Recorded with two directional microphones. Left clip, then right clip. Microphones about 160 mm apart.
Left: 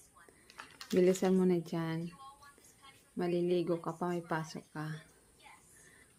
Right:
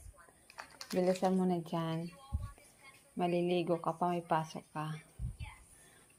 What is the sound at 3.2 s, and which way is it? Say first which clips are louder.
Speech: even; centre (ahead or behind).